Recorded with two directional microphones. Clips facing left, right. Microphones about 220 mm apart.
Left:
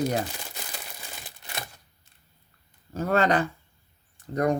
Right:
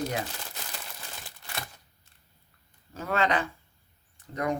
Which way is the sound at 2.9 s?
40° left (ahead or behind).